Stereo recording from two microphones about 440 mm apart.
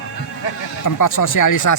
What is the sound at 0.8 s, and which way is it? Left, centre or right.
Speech, left.